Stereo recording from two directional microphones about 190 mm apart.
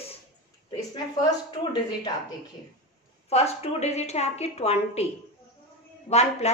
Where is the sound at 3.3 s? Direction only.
35° left (ahead or behind).